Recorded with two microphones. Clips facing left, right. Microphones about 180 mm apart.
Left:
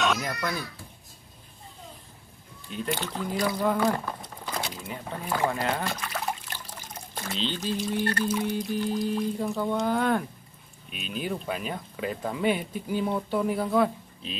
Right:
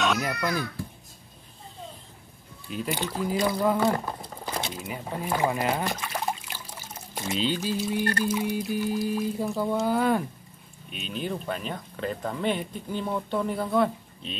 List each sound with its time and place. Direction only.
0.0 s speech: centre (ahead or behind)
2.7 s speech: 5° right (ahead or behind)
3.7 s crumpling: 20° right (ahead or behind)
5.2 s speech: 15° right (ahead or behind)
6.5 s water: 10° right (ahead or behind)
7.3 s speech: 10° right (ahead or behind)